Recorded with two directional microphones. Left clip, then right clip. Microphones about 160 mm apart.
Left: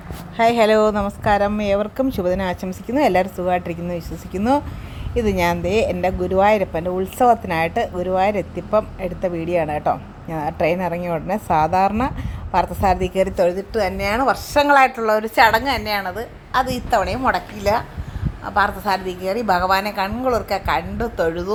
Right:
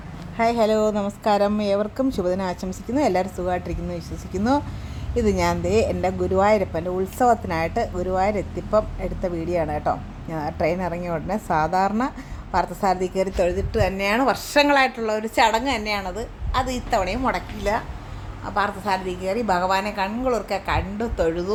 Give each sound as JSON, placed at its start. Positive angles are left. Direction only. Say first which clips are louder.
{"t": 0.3, "sound": "a woman's voice", "louder": "left 5 dB", "side_deg": 30}
{"t": 1.2, "sound": "a woman's voice", "louder": "left 2 dB", "side_deg": -10}
{"t": 1.6, "sound": "a woman's voice", "louder": "left 3 dB", "side_deg": 5}
{"t": 14.9, "sound": "a woman's voice", "louder": "left 5 dB", "side_deg": 10}
{"t": 16.5, "sound": "a woman's voice", "louder": "left 4 dB", "side_deg": 20}